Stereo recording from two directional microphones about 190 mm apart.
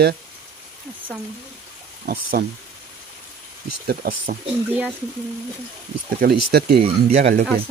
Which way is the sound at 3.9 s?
50° right (ahead or behind).